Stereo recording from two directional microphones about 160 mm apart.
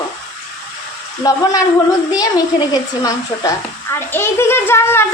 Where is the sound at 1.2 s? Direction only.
20° left (ahead or behind).